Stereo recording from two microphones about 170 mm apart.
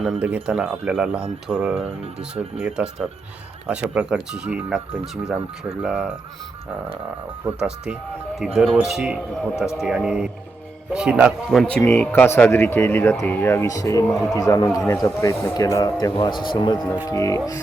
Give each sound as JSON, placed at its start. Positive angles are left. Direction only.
{"t": 0.0, "sound": "speech", "side_deg": -5}
{"t": 5.8, "sound": "speech", "side_deg": -5}
{"t": 7.4, "sound": "speech", "side_deg": -5}
{"t": 14.1, "sound": "speech", "side_deg": 0}
{"t": 14.3, "sound": "speech", "side_deg": 20}